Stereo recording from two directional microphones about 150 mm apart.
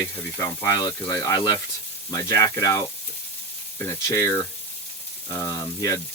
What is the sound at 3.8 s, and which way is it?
Speech, 20° left (ahead or behind).